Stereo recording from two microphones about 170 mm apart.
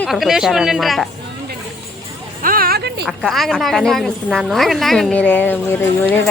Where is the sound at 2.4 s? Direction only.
60° right (ahead or behind).